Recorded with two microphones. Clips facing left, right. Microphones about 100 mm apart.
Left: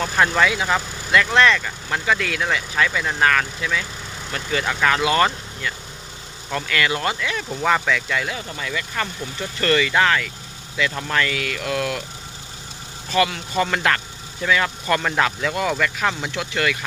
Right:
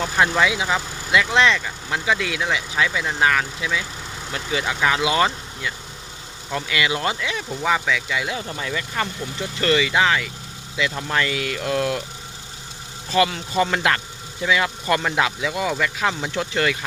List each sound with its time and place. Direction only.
0.0 s speech: 15° right (ahead or behind)
7.5 s speech: 5° right (ahead or behind)
8.3 s speech: 25° right (ahead or behind)
13.1 s speech: 25° right (ahead or behind)
16.3 s speech: 35° right (ahead or behind)